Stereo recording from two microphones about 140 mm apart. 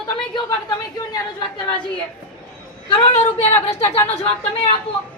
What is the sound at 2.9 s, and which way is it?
Speech, 50° left (ahead or behind).